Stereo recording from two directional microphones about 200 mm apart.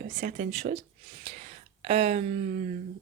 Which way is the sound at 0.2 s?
40° right (ahead or behind).